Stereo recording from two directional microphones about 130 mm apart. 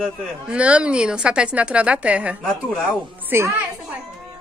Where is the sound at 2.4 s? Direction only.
5° left (ahead or behind).